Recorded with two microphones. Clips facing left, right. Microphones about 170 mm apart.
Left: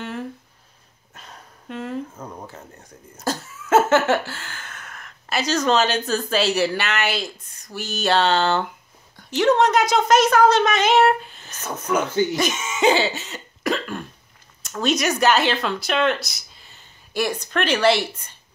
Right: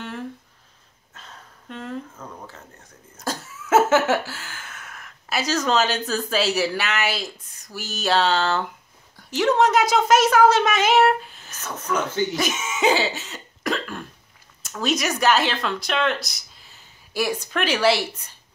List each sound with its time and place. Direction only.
1.1 s a sound: 15° left (ahead or behind)
2.1 s speech: 20° left (ahead or behind)
3.3 s a sound: 5° right (ahead or behind)
9.1 s a woman's voice: centre (ahead or behind)
12.4 s cough: 5° right (ahead or behind)
14.6 s speech: centre (ahead or behind)